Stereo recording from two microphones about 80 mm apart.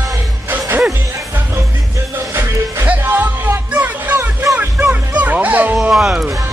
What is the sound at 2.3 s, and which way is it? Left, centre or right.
Music, right.